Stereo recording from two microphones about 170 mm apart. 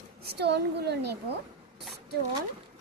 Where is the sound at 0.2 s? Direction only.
70° right (ahead or behind).